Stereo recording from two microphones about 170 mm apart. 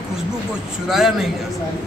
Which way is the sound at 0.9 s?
Centre (ahead or behind).